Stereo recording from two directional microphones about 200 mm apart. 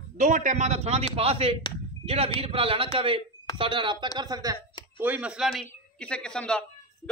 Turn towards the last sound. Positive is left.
turn(degrees=5)  # may be behind; listen again after turning